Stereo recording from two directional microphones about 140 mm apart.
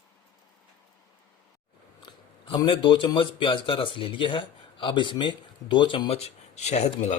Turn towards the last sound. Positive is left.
turn(degrees=55)  # may be behind; listen again after turning